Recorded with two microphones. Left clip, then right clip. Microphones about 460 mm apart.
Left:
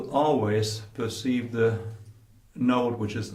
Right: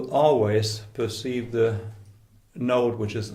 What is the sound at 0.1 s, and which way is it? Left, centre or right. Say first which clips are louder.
Speech: right 4 dB; right.